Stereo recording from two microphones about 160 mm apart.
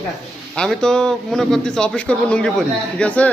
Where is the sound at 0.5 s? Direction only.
5° left (ahead or behind).